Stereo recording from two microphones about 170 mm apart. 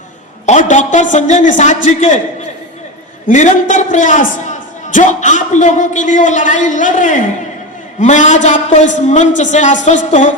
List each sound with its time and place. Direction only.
0.4 s a woman's voice: 45° left (ahead or behind)
3.2 s a woman's voice: 45° left (ahead or behind)